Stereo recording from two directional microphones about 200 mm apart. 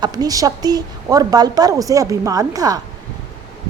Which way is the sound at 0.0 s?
20° right (ahead or behind).